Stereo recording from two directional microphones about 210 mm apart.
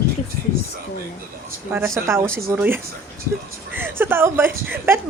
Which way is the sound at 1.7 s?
10° right (ahead or behind).